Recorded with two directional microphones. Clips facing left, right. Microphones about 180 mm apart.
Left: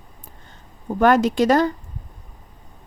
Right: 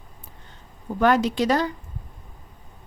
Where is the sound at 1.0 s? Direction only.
50° left (ahead or behind).